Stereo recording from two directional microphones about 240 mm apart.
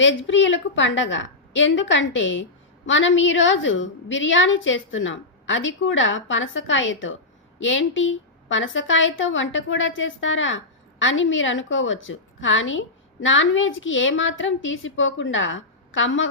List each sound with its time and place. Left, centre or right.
0.0 s a woman's voice: left